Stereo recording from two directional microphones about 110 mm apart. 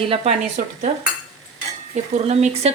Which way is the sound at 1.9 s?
90° right.